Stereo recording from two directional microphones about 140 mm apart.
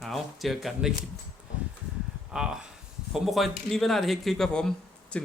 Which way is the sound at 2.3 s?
5° right (ahead or behind).